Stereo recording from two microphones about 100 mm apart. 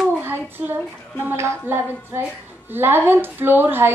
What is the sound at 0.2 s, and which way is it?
Child singing, 20° right (ahead or behind).